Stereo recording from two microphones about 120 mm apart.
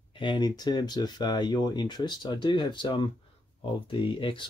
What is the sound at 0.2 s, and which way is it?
Speech, 40° left (ahead or behind).